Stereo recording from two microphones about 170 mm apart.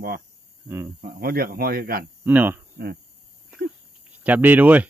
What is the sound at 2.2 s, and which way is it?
Speech, 10° right (ahead or behind).